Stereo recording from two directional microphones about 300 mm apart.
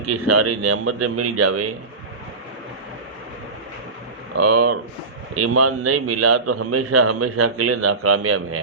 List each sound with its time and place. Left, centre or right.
0.3 s a man's voice: right
4.4 s a man's voice: right